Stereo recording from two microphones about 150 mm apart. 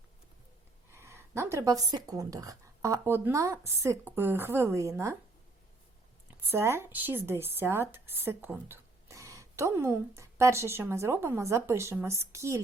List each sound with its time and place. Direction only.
0.9 s speech: 15° right (ahead or behind)
6.4 s speech: 15° right (ahead or behind)